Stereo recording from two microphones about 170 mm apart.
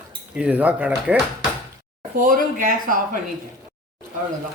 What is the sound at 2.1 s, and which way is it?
Speech, 50° right (ahead or behind).